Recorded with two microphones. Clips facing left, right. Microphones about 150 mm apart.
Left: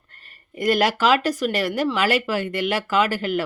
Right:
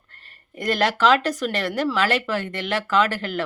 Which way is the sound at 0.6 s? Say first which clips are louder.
Left 1 dB; 10° left (ahead or behind).